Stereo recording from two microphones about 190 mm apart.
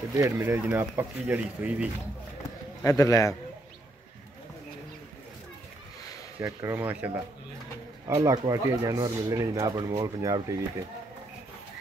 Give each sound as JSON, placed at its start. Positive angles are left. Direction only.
{"t": 0.2, "sound": "speech", "side_deg": -15}
{"t": 2.8, "sound": "a man's voice", "side_deg": 15}
{"t": 6.4, "sound": "speech", "side_deg": -10}
{"t": 8.1, "sound": "speech", "side_deg": -15}